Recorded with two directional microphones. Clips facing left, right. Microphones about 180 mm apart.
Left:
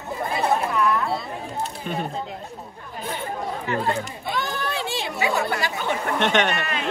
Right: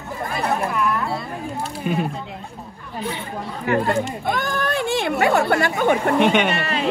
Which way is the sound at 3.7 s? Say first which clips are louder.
Right 7 dB; 55° right (ahead or behind).